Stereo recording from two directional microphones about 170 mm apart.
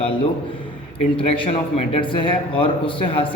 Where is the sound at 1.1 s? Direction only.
35° left (ahead or behind).